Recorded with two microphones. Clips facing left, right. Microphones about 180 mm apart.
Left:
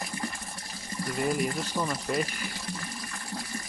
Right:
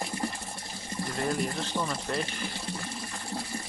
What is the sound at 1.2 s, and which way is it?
Speech, 5° left (ahead or behind).